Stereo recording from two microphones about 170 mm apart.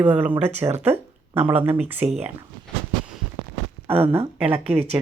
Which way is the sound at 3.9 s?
35° right (ahead or behind).